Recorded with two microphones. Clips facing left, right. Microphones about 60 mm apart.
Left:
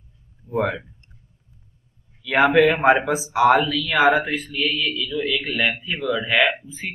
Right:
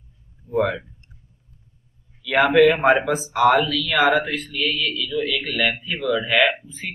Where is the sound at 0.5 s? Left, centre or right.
Centre.